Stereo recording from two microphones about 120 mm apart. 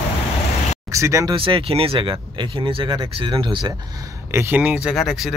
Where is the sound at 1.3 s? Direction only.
45° right (ahead or behind).